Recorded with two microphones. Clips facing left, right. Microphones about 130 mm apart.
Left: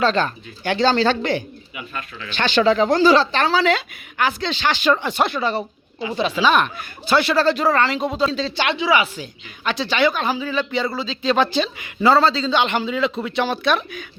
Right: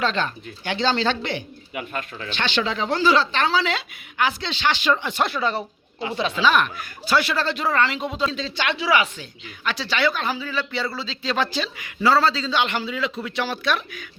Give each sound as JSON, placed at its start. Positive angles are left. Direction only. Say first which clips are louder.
{"t": 0.0, "sound": "speech", "louder": "left 5 dB", "side_deg": 40}
{"t": 1.7, "sound": "speech", "louder": "right 3 dB", "side_deg": -50}
{"t": 2.3, "sound": "speech", "louder": "left 8 dB", "side_deg": 45}
{"t": 5.2, "sound": "speech", "louder": "left 3 dB", "side_deg": 0}
{"t": 6.4, "sound": "speech", "louder": "left 2 dB", "side_deg": 25}
{"t": 8.8, "sound": "speech", "louder": "left 1 dB", "side_deg": 5}
{"t": 9.6, "sound": "speech", "louder": "left 4 dB", "side_deg": 20}